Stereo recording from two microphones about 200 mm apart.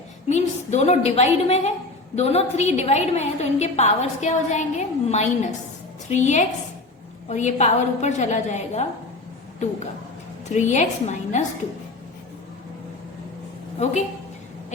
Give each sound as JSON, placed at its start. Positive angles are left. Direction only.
{"t": 0.3, "sound": "a woman's voice", "side_deg": 35}
{"t": 10.5, "sound": "a woman's voice", "side_deg": 35}